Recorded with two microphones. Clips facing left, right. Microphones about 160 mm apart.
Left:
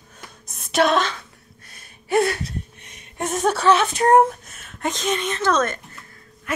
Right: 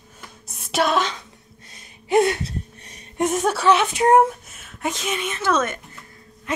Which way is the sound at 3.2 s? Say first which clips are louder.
Right 1 dB; 5° right (ahead or behind).